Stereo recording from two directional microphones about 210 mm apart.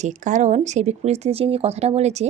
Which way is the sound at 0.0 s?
35° right (ahead or behind).